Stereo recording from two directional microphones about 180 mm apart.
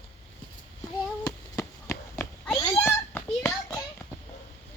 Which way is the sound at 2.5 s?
20° left (ahead or behind).